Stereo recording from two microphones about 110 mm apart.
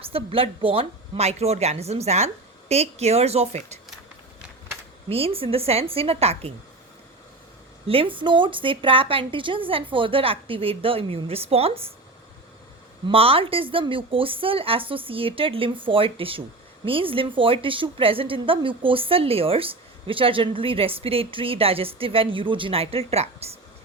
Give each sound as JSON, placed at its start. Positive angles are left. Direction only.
{"t": 0.0, "sound": "a woman's voice", "side_deg": -55}
{"t": 5.0, "sound": "a woman's voice", "side_deg": -60}
{"t": 7.9, "sound": "a woman's voice", "side_deg": -55}
{"t": 13.1, "sound": "a woman's voice", "side_deg": -60}